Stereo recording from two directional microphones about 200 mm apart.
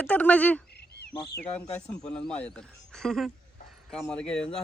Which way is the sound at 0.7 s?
55° left (ahead or behind).